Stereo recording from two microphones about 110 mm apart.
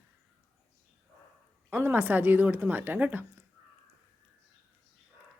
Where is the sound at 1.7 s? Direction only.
20° right (ahead or behind).